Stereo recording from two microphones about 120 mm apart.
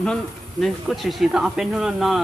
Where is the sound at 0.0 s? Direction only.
5° left (ahead or behind).